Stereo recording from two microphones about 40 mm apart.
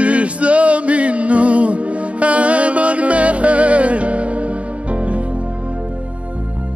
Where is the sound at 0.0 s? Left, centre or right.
Right.